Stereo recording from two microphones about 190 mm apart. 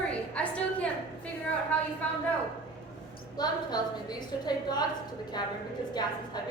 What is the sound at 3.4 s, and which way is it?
A woman's voice, 20° left (ahead or behind).